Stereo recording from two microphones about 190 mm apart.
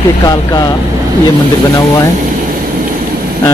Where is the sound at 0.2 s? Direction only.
20° left (ahead or behind).